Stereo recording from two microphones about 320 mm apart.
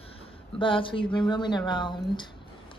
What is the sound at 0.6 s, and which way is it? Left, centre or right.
Speech, centre.